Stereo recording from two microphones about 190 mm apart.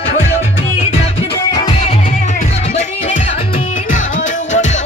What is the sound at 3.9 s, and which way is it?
Music, 40° left (ahead or behind).